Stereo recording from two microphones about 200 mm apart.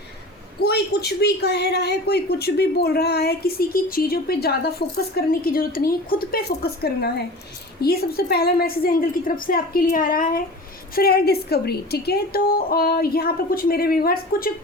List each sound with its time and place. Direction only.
0.6 s a woman's voice: 55° left (ahead or behind)